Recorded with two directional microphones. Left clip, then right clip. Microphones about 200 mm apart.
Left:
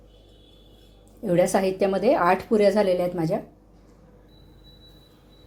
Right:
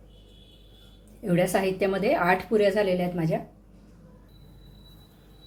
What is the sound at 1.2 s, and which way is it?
A woman's voice, 20° left (ahead or behind).